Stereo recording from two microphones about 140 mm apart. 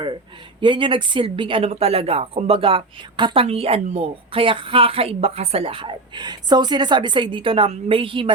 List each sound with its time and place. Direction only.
0.6 s a woman's voice: 35° right (ahead or behind)